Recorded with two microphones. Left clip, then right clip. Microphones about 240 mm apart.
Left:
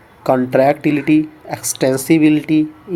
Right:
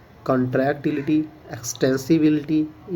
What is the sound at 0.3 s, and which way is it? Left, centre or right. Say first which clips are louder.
Speech: left 8 dB; centre.